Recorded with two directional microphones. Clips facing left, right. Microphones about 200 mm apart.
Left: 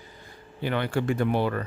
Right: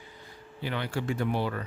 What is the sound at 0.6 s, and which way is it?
Speech, 55° left (ahead or behind).